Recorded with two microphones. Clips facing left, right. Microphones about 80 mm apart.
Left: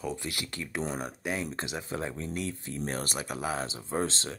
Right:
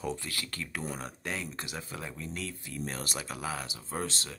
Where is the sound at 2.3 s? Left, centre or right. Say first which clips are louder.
Left 5 dB; left.